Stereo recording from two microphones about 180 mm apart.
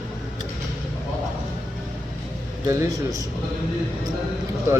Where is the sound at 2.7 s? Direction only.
20° right (ahead or behind).